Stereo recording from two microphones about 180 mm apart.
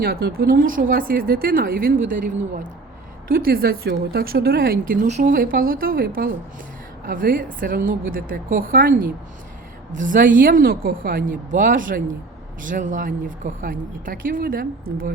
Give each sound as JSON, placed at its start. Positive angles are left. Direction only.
{"t": 0.0, "sound": "speech", "side_deg": -60}
{"t": 5.0, "sound": "speech", "side_deg": -45}